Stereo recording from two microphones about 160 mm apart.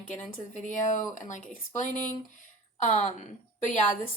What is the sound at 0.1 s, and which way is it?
Speech, 50° left (ahead or behind).